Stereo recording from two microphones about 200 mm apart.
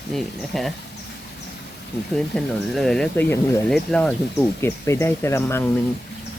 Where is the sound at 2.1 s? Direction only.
Centre (ahead or behind).